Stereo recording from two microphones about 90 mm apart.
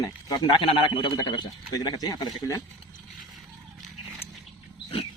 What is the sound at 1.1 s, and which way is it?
Speech, 55° left (ahead or behind).